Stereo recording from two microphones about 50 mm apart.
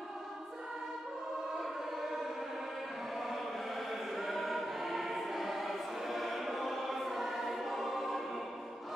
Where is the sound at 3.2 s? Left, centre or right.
Centre.